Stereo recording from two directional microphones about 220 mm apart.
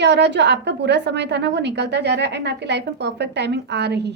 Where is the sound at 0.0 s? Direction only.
50° right (ahead or behind).